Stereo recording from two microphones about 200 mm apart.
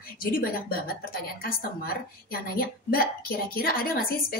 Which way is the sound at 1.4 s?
50° left (ahead or behind).